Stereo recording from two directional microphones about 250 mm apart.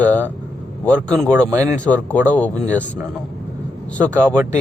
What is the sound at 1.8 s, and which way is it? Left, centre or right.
Speech, centre.